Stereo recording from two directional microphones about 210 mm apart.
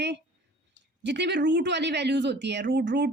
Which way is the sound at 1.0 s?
55° right (ahead or behind).